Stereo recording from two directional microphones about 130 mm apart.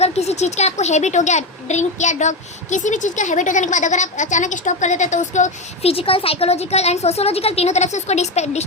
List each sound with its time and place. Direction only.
0.0 s a woman's voice: 55° left (ahead or behind)